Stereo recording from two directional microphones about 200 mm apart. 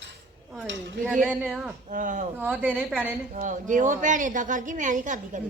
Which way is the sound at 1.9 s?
40° right (ahead or behind).